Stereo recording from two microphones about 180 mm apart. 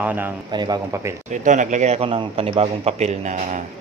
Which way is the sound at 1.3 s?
45° right (ahead or behind).